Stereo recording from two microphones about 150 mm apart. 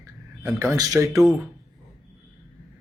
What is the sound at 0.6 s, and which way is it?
Speech, 20° right (ahead or behind).